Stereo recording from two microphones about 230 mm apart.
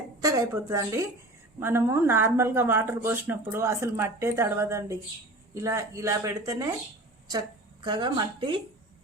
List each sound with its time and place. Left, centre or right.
0.2 s speech: centre
7.9 s speech: centre